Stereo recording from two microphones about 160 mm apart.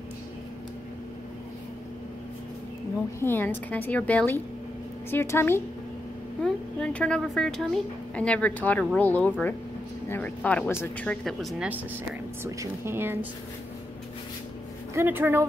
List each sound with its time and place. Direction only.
3.2 s a woman's voice: 15° left (ahead or behind)
12.4 s speech: 15° right (ahead or behind)
15.0 s speech: 15° right (ahead or behind)